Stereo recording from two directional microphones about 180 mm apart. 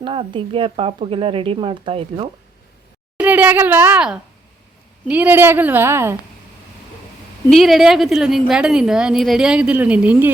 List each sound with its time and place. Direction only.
0.0 s speech: 30° right (ahead or behind)
3.2 s a woman's voice: 10° right (ahead or behind)
7.5 s a woman's voice: centre (ahead or behind)